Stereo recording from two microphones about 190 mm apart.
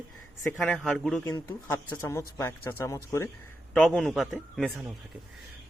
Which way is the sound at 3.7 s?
5° left (ahead or behind).